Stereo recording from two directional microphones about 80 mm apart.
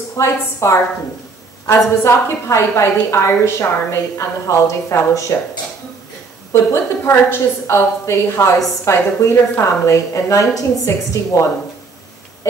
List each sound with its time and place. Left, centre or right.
0.2 s a woman's voice: left
6.5 s a woman's voice: left